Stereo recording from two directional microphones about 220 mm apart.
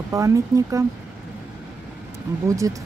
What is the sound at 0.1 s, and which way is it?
Speech, 15° right (ahead or behind).